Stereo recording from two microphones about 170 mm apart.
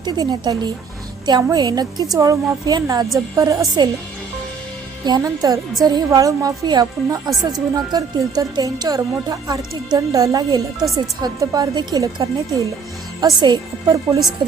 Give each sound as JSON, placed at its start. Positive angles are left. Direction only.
{"t": 0.0, "sound": "speech", "side_deg": -25}
{"t": 5.0, "sound": "speech", "side_deg": -20}